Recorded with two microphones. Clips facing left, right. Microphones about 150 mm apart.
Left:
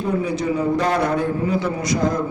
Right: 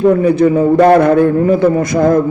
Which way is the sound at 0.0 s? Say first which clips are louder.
Right 12 dB; 60° right (ahead or behind).